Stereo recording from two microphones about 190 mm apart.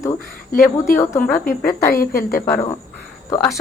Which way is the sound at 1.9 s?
50° left (ahead or behind).